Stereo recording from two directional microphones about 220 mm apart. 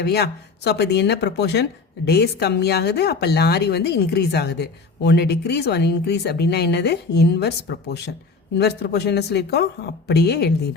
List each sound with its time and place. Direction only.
0.0 s speech: 45° left (ahead or behind)